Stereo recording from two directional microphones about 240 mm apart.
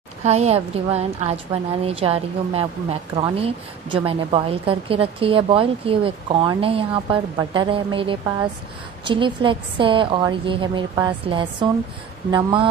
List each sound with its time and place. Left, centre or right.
0.2 s a woman's voice: right